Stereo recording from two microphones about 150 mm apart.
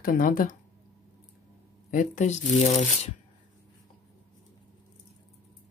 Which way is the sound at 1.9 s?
55° left (ahead or behind).